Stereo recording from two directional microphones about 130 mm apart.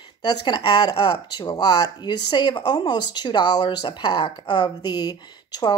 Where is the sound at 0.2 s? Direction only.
30° left (ahead or behind).